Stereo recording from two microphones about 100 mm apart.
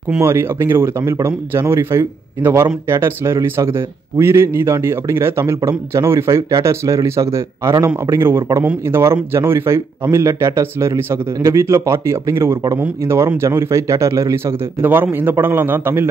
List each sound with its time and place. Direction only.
0.2 s a man's voice: 25° right (ahead or behind)